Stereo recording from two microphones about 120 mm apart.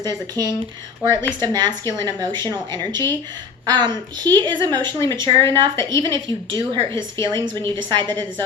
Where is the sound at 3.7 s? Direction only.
35° right (ahead or behind).